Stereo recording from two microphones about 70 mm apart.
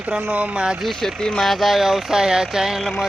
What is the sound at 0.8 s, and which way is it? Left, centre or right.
Speech, centre.